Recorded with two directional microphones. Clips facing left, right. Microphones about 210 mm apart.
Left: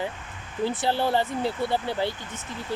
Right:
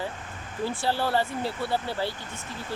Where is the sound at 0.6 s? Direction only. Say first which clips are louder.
Left 3 dB; 20° left (ahead or behind).